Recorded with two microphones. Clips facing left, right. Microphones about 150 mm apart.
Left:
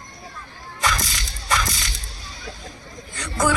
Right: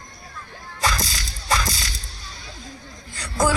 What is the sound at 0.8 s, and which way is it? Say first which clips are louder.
Music: even; 30° right (ahead or behind).